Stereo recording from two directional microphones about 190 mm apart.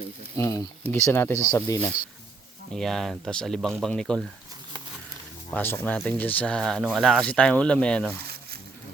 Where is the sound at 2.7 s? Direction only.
Centre (ahead or behind).